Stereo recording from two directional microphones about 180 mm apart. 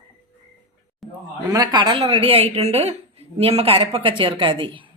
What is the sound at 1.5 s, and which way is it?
A woman's voice, 25° right (ahead or behind).